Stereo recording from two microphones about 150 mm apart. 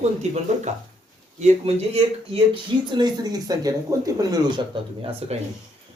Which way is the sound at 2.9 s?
25° right (ahead or behind).